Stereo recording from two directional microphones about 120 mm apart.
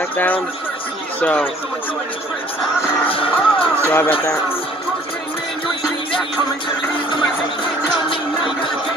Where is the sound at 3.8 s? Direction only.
20° left (ahead or behind).